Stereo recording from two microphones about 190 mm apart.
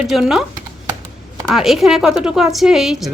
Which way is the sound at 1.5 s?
Centre (ahead or behind).